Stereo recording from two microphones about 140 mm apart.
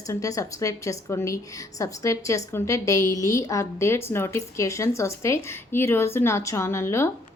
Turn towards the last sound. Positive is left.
turn(degrees=20)  # may be behind; listen again after turning